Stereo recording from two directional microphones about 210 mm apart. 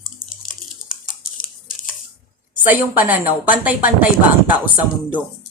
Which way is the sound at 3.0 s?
5° right (ahead or behind).